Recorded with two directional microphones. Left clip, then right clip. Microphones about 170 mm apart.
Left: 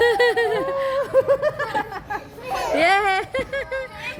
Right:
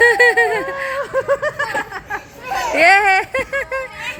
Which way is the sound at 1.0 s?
30° left (ahead or behind).